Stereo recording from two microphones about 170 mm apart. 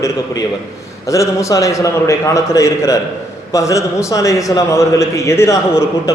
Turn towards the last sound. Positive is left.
turn(degrees=15)  # may be behind; listen again after turning